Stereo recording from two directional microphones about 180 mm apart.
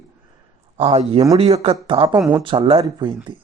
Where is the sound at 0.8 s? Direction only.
35° right (ahead or behind).